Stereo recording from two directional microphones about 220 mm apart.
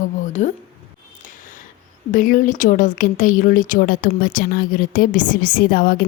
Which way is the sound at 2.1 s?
35° left (ahead or behind).